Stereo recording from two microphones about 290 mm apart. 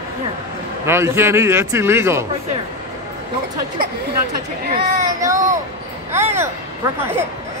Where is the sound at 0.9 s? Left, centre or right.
Centre.